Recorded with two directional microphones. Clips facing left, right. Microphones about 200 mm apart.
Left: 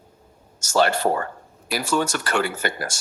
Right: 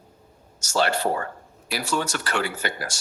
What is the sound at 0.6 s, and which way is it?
Speech, 50° left (ahead or behind).